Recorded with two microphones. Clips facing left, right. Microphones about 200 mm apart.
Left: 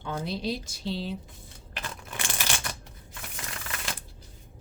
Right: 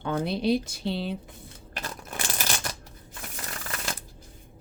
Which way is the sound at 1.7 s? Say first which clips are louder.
Right 2 dB; 40° right (ahead or behind).